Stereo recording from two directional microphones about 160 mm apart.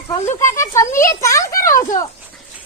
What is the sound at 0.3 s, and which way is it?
Speech, 20° left (ahead or behind).